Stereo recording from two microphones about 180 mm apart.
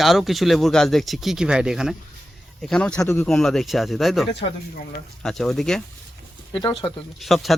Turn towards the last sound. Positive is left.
turn(degrees=0)  # may be behind; listen again after turning